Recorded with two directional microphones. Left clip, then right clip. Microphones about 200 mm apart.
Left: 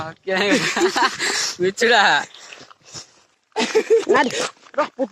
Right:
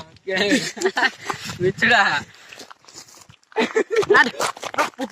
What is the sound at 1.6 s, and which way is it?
Speech, 35° left (ahead or behind).